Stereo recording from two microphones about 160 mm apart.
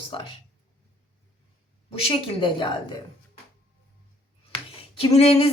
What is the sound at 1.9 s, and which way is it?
Speech, 35° left (ahead or behind).